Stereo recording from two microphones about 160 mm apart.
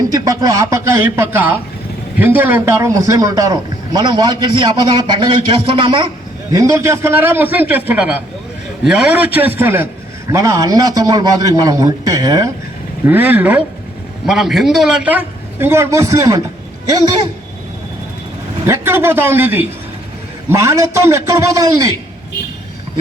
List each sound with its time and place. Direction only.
0.1 s a man's voice: 20° right (ahead or behind)
6.5 s a man's voice: 20° right (ahead or behind)
13.1 s a man's voice: 10° right (ahead or behind)
18.6 s a man's voice: 15° right (ahead or behind)